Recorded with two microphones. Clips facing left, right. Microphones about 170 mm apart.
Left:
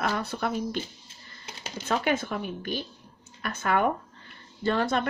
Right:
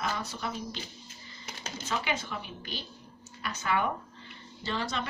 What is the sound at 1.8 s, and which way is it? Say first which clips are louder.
Speech: left 7 dB; 55° left (ahead or behind).